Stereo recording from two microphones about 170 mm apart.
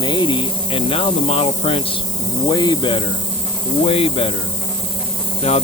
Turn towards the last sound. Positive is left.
turn(degrees=35)  # may be behind; listen again after turning